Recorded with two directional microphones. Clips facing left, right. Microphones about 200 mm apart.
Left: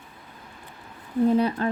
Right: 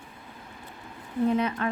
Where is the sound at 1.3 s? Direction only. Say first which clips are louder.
Left 4 dB; 35° left (ahead or behind).